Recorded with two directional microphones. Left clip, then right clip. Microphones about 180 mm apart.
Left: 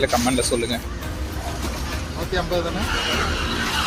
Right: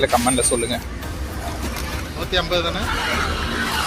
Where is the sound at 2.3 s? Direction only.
40° left (ahead or behind).